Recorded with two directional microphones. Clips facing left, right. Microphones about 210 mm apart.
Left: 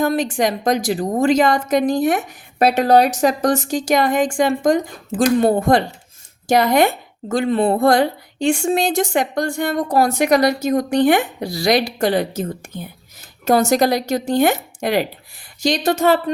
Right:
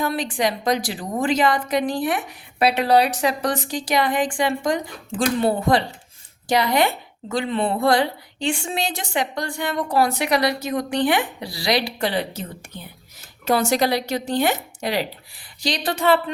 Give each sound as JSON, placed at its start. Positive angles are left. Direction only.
{"t": 0.0, "sound": "a woman's voice", "side_deg": 45}